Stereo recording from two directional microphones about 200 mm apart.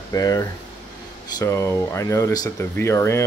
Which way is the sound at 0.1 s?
20° left (ahead or behind).